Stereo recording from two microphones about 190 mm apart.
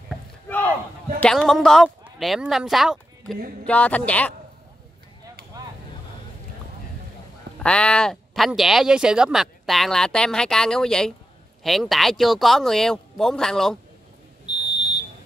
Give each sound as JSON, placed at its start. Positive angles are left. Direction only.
{"t": 0.1, "sound": "a sound", "side_deg": 10}
{"t": 1.2, "sound": "speech", "side_deg": 5}
{"t": 5.5, "sound": "vehicle", "side_deg": -20}
{"t": 7.5, "sound": "speech", "side_deg": 5}
{"t": 14.7, "sound": "smoke detector", "side_deg": 25}